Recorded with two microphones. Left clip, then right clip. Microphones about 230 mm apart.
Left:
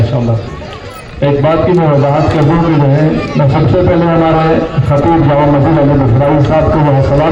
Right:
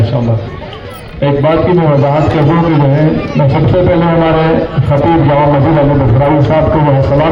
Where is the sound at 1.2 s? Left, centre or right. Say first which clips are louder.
Even; right.